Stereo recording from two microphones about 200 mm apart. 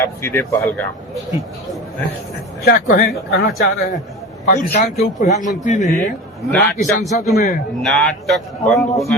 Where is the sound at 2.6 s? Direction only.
50° left (ahead or behind).